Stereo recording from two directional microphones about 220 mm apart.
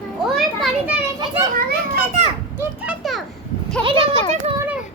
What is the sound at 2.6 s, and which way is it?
Children playing, 5° right (ahead or behind).